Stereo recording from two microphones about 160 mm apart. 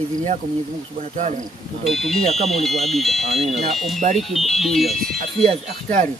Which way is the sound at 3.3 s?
40° right (ahead or behind).